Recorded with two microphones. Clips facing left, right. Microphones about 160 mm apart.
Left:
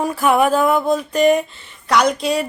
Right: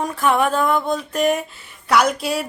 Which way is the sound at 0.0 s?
5° left (ahead or behind).